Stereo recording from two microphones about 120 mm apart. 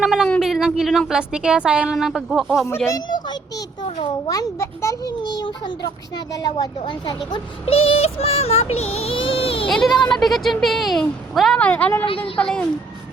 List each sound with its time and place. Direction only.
0.0 s a sound: 5° right (ahead or behind)
0.3 s speech: centre (ahead or behind)
4.3 s a child's voice: 25° left (ahead or behind)
5.2 s a child's voice: 35° left (ahead or behind)
7.6 s music: 55° left (ahead or behind)
9.6 s a woman's voice: centre (ahead or behind)
12.0 s music: 50° left (ahead or behind)
12.4 s a woman's voice: 5° left (ahead or behind)